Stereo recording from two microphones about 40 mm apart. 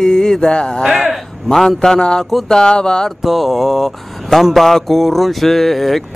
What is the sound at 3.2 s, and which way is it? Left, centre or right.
Speech, centre.